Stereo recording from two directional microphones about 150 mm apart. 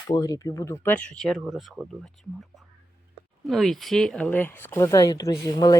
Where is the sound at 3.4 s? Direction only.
Centre (ahead or behind).